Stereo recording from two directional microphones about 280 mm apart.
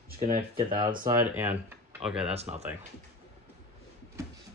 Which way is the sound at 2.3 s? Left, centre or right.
Right.